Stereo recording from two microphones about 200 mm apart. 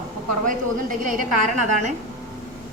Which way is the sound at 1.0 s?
40° right (ahead or behind).